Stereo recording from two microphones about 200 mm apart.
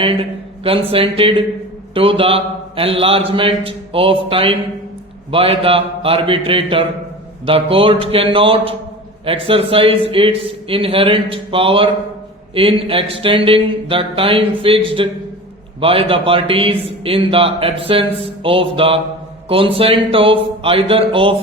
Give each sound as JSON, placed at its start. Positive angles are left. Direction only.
{"t": 0.6, "sound": "a man's voice", "side_deg": -30}